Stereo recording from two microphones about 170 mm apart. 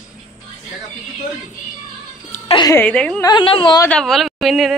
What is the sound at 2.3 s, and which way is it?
Speech, 50° left (ahead or behind).